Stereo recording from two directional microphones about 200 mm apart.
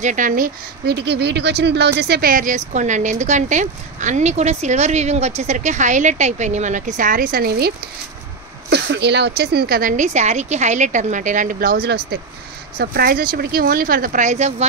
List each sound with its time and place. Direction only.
0.0 s speech: 40° right (ahead or behind)